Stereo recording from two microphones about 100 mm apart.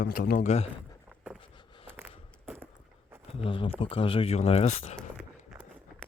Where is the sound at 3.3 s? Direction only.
65° left (ahead or behind); by 4.8 s 90° left.